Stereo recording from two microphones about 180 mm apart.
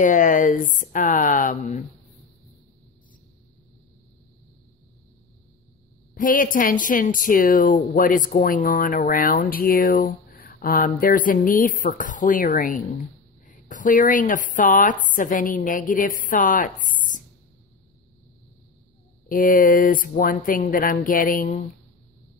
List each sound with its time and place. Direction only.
0.0 s a woman's voice: 45° left (ahead or behind)
6.1 s a woman's voice: 50° left (ahead or behind)
16.8 s a sound: 45° left (ahead or behind)
19.2 s a woman's voice: 50° left (ahead or behind)